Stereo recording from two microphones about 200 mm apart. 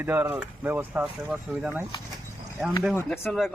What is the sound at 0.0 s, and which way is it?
Speech, 10° right (ahead or behind).